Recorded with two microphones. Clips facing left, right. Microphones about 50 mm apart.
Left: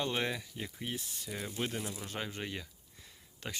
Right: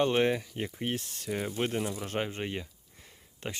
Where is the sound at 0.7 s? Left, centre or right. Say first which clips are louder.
Right 6 dB; right.